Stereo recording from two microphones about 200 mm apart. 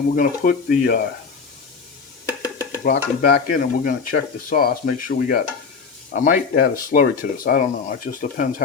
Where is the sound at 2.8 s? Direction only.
50° left (ahead or behind).